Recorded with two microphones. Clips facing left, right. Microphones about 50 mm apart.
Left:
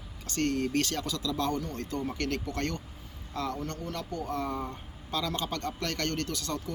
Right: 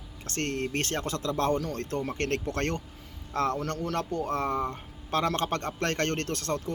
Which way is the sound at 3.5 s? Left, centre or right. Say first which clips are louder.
Right 6 dB; right.